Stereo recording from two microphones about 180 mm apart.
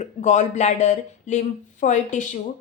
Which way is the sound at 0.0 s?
40° left (ahead or behind).